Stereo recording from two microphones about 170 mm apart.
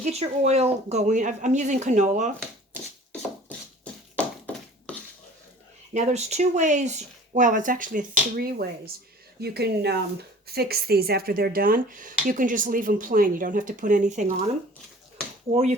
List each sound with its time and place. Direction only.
0.0 s speech: 40° right (ahead or behind)
4.1 s a sound: 10° left (ahead or behind)
5.9 s speech: 45° right (ahead or behind)
9.4 s speech: 70° right (ahead or behind); by 14.4 s 45° right (ahead or behind)
15.5 s speech: 35° right (ahead or behind)